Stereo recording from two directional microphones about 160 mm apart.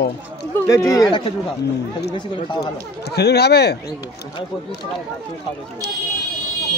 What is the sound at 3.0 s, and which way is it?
Speech, 90° left.